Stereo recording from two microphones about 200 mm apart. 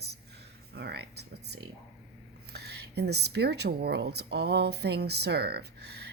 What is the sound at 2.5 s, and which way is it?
Speech, 55° right (ahead or behind).